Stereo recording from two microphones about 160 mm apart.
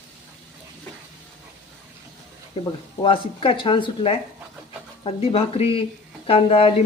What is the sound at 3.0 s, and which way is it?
Speech, 35° left (ahead or behind).